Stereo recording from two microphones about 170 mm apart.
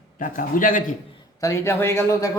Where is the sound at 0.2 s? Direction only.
55° left (ahead or behind).